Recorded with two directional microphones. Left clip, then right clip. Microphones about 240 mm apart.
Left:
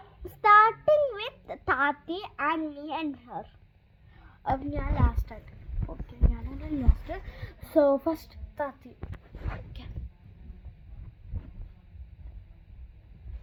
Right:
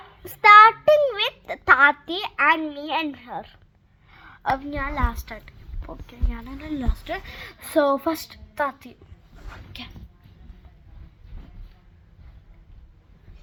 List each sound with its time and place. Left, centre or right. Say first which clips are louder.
0.2 s a sound: right 8 dB; right
1.6 s a woman's voice: right 11 dB; right
4.1 s a woman's voice: right 6 dB; centre